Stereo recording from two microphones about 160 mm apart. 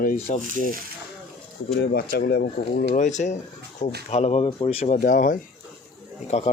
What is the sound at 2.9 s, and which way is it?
Speech, 50° left (ahead or behind).